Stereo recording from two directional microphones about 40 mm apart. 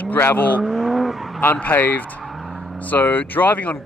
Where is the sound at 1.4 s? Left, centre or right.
Left.